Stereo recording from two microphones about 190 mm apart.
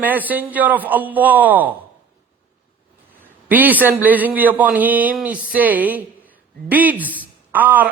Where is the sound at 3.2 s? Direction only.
10° right (ahead or behind).